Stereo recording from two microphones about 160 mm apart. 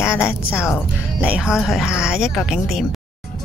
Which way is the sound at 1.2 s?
5° right (ahead or behind).